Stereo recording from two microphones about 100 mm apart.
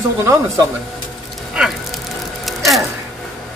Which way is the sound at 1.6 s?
10° right (ahead or behind).